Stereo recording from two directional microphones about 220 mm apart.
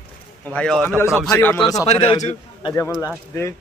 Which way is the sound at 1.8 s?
30° left (ahead or behind).